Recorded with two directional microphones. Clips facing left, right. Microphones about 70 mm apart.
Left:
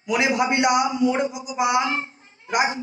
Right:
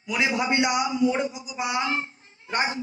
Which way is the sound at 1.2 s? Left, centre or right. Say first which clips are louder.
Left 4 dB; left.